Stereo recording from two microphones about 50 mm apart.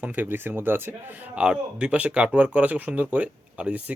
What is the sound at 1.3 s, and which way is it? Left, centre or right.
Speech, centre.